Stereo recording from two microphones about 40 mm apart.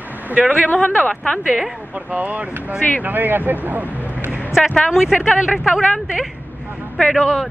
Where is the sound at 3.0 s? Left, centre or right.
Right.